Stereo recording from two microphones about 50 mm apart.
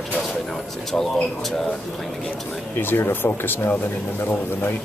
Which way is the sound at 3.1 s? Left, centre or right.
Left.